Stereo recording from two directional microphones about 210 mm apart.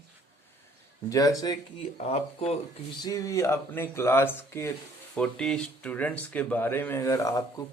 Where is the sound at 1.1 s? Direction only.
15° left (ahead or behind).